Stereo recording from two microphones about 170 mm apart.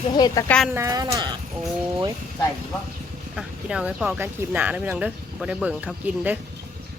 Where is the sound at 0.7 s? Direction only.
20° right (ahead or behind).